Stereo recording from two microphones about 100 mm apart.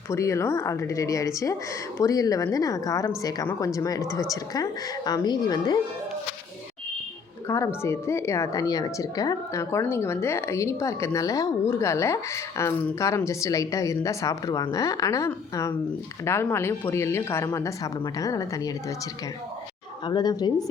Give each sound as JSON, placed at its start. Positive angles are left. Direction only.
{"t": 0.1, "sound": "speech", "side_deg": 30}
{"t": 7.4, "sound": "a woman's voice", "side_deg": 30}
{"t": 20.1, "sound": "a woman's voice", "side_deg": 40}